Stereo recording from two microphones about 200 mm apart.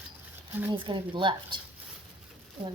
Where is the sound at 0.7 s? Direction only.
25° right (ahead or behind).